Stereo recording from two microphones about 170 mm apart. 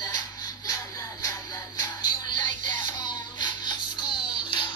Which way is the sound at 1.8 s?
20° left (ahead or behind).